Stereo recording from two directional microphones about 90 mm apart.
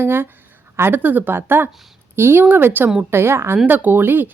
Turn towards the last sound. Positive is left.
turn(degrees=-25)  # may be behind; listen again after turning